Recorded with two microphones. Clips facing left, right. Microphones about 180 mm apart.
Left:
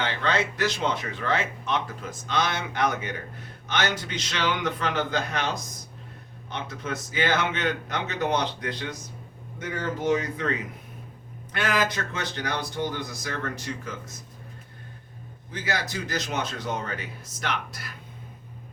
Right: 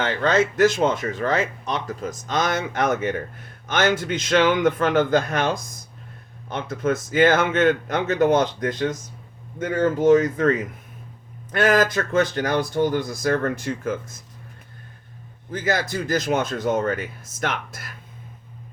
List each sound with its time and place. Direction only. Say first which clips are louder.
0.0 s speech: right 6 dB; 45° right (ahead or behind)
11.5 s speech: right 8 dB; 45° right (ahead or behind)
15.6 s speech: right 7 dB; 50° right (ahead or behind)